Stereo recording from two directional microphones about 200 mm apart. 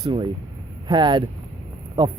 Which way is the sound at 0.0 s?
25° right (ahead or behind).